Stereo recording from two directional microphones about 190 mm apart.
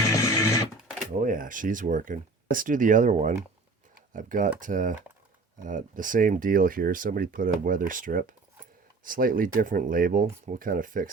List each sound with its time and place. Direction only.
0.0 s music: 15° left (ahead or behind)
1.2 s speech: 45° right (ahead or behind)